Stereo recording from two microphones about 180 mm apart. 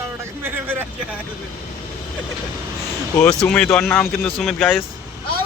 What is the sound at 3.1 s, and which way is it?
Speech, 20° left (ahead or behind).